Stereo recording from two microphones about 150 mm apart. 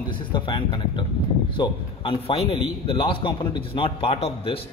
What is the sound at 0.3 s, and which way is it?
A man's voice, 35° left (ahead or behind).